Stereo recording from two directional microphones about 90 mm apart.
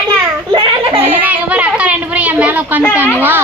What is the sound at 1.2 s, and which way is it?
A woman's voice, 15° right (ahead or behind).